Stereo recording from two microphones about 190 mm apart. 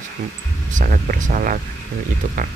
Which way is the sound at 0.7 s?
45° right (ahead or behind).